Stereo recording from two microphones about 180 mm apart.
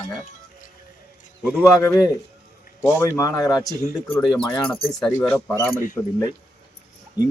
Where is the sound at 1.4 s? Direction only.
5° right (ahead or behind).